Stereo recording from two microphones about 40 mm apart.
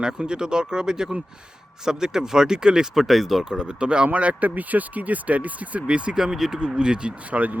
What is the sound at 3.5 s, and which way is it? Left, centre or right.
Speech, right.